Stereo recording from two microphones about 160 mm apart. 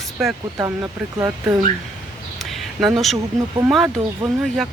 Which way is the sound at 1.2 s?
20° right (ahead or behind).